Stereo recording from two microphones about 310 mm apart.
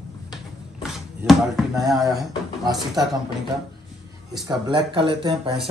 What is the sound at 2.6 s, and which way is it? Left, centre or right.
Speech, centre.